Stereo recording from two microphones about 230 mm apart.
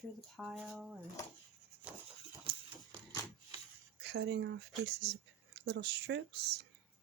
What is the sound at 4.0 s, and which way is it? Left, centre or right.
Speech, right.